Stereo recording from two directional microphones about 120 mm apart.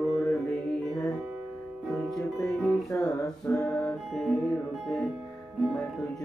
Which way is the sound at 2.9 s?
15° left (ahead or behind).